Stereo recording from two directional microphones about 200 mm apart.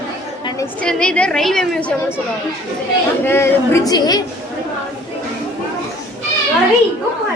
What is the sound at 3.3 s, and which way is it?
Speech, 10° left (ahead or behind).